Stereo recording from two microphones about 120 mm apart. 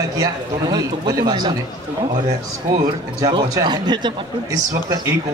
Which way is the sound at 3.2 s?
30° right (ahead or behind).